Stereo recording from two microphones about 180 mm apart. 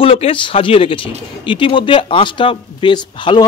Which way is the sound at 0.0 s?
30° left (ahead or behind).